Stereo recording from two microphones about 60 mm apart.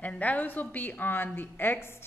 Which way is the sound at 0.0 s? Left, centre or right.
Left.